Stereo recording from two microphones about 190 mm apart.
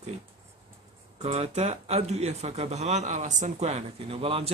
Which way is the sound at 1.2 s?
35° right (ahead or behind).